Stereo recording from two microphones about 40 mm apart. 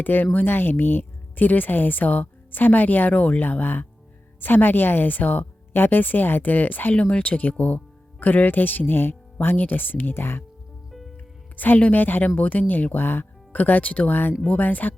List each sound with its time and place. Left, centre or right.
0.0 s speech: left
3.6 s speech: left
6.9 s speech: left
8.2 s speech: left
11.5 s speech: left